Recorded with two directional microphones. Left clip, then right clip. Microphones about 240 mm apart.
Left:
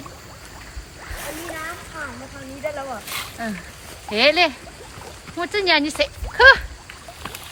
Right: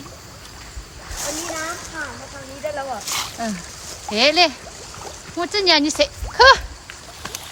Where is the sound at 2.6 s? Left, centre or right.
Right.